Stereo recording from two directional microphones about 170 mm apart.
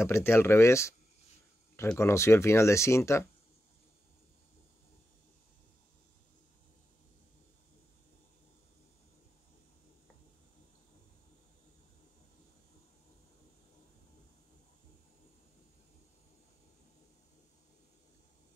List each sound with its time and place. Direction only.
0.0 s speech: 15° left (ahead or behind)
2.0 s speech: 15° left (ahead or behind)